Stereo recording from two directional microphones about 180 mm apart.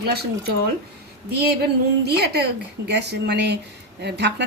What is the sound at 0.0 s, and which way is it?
Speech, 60° right (ahead or behind).